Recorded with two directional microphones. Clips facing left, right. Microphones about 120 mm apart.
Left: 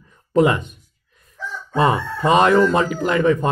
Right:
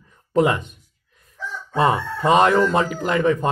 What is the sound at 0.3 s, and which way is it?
Speech, 25° right (ahead or behind).